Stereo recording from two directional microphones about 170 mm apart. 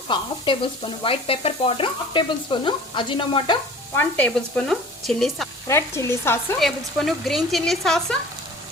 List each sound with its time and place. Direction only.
0.1 s stir: 30° left (ahead or behind)
3.9 s frying: 5° left (ahead or behind)
5.6 s speech: 15° left (ahead or behind)
6.6 s frying: centre (ahead or behind)